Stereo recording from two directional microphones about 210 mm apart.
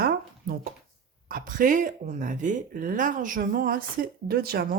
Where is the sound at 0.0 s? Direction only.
45° right (ahead or behind).